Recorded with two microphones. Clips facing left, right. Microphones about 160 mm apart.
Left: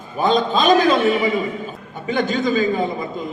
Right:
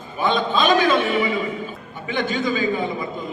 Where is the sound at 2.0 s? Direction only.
40° left (ahead or behind).